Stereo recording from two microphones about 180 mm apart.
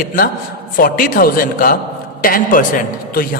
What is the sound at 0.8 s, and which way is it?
A man's voice, 50° left (ahead or behind).